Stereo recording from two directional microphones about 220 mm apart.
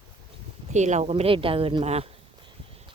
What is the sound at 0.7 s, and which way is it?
A woman's voice, 30° right (ahead or behind).